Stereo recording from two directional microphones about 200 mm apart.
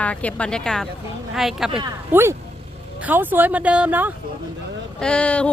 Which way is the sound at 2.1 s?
10° right (ahead or behind).